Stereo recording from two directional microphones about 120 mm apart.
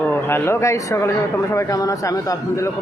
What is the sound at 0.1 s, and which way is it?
A man's voice, 20° left (ahead or behind).